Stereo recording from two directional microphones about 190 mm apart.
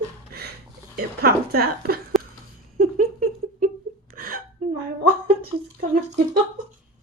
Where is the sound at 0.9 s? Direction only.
55° right (ahead or behind).